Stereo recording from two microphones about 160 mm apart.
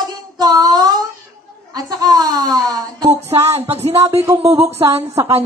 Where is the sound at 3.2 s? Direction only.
40° right (ahead or behind).